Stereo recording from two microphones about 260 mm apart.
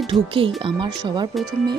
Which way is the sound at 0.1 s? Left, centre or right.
Centre.